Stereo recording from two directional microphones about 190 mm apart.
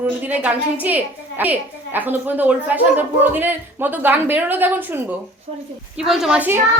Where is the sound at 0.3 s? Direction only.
10° right (ahead or behind).